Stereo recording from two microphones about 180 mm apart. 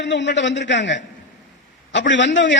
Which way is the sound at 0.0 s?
80° left.